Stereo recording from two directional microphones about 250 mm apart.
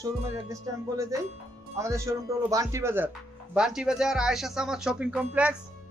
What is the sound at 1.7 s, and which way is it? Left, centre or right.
A man's voice, centre.